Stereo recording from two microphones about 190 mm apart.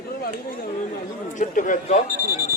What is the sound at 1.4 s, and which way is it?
Speech, 40° left (ahead or behind).